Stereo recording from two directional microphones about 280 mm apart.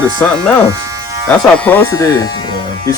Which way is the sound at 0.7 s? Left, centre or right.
Centre.